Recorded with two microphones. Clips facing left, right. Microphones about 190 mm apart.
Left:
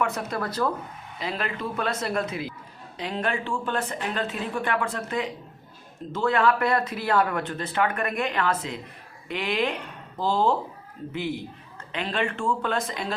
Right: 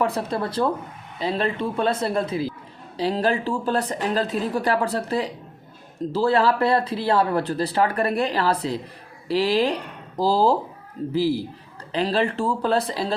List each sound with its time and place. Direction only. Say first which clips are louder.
0.0 s speech: right 4 dB; 30° right (ahead or behind)